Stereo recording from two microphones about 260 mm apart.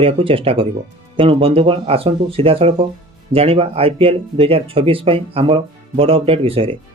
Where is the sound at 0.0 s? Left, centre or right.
Right.